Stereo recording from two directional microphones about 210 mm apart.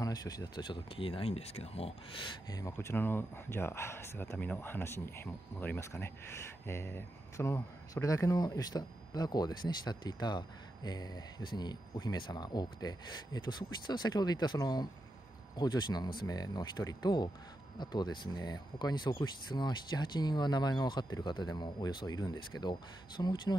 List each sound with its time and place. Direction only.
0.0 s speech: 20° left (ahead or behind)